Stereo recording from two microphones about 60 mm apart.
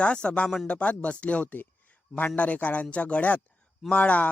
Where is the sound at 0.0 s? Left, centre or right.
Centre.